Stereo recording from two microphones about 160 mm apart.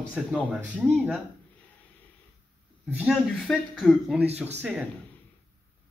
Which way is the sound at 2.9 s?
5° right (ahead or behind).